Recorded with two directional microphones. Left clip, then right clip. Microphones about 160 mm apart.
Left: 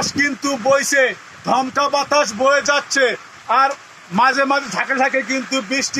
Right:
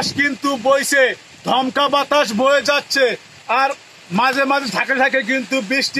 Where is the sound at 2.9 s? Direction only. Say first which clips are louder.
Even; 15° right (ahead or behind).